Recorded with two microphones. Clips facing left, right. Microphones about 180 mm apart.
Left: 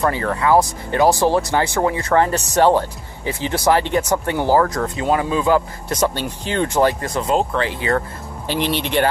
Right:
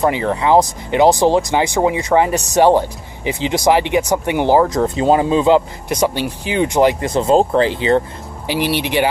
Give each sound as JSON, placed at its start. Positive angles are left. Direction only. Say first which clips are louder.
{"t": 0.0, "sound": "speech", "louder": "right 3 dB", "side_deg": -20}
{"t": 5.9, "sound": "speech", "louder": "right 3 dB", "side_deg": -10}
{"t": 8.5, "sound": "speech", "louder": "right 3 dB", "side_deg": -10}